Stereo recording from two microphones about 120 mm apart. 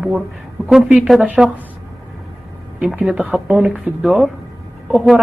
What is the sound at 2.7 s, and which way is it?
Speech, 15° right (ahead or behind).